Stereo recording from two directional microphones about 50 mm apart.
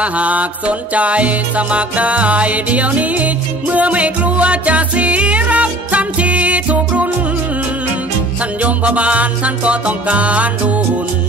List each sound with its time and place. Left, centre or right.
0.0 s music: right
8.5 s music: right